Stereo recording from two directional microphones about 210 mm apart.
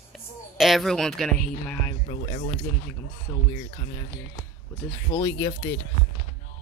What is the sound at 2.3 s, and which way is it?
Speech, 30° left (ahead or behind).